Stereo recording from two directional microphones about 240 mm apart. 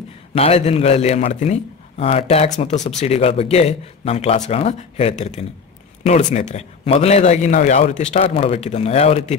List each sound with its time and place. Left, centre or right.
0.3 s speech: left